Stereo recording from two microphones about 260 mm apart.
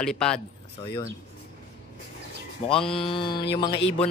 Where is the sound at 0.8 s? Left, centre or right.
Centre.